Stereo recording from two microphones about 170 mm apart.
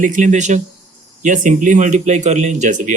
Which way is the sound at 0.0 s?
50° right (ahead or behind).